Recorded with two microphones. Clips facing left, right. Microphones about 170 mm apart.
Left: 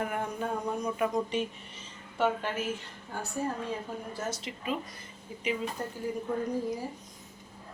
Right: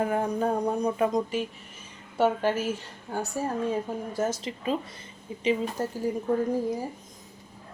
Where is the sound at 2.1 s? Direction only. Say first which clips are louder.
Right 5 dB; 35° right (ahead or behind).